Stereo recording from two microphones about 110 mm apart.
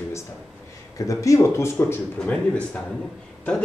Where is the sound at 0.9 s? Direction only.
30° left (ahead or behind).